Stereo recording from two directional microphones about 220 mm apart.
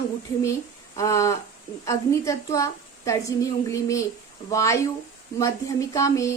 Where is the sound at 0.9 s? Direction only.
15° left (ahead or behind).